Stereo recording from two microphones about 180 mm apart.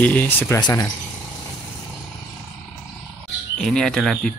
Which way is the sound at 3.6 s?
5° left (ahead or behind).